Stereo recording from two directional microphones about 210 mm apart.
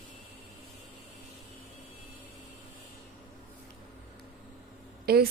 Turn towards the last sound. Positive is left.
turn(degrees=-45)  # may be behind; listen again after turning